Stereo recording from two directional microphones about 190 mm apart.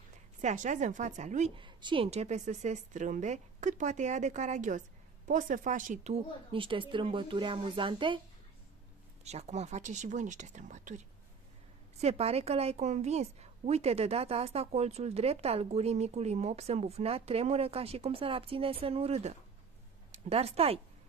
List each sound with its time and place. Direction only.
0.4 s a woman's voice: 40° right (ahead or behind)
1.6 s a woman's voice: 25° right (ahead or behind)
9.2 s a woman's voice: 35° right (ahead or behind)
12.0 s a woman's voice: 30° right (ahead or behind)